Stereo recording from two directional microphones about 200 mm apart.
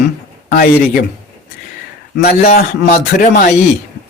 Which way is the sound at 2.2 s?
50° left (ahead or behind).